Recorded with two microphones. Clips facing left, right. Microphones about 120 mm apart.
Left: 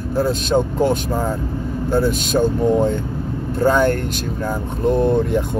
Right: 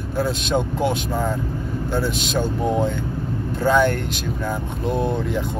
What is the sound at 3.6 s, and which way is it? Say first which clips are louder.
Speech: left 2 dB; 45° left (ahead or behind).